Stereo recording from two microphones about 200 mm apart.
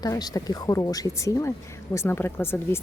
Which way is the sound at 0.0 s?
20° left (ahead or behind).